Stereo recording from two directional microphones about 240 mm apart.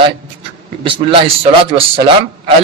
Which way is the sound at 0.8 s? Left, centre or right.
Right.